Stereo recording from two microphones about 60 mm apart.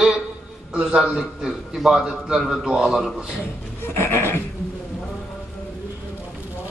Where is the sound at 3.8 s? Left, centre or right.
Left.